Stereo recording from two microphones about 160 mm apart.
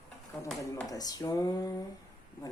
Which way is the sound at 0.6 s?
20° left (ahead or behind).